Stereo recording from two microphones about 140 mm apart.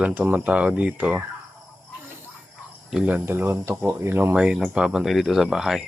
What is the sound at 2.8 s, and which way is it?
Speech, 5° right (ahead or behind).